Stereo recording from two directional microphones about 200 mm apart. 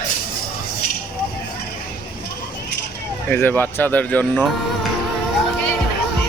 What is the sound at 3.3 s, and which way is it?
Speech, 10° left (ahead or behind).